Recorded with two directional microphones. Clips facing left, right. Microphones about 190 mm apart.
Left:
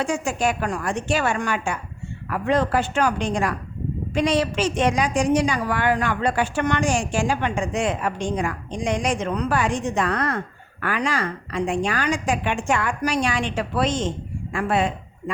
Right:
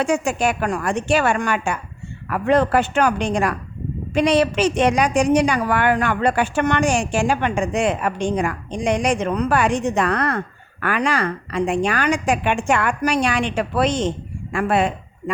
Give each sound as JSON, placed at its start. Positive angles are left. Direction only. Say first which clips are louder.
{"t": 0.0, "sound": "a woman's voice", "louder": "right 3 dB", "side_deg": -65}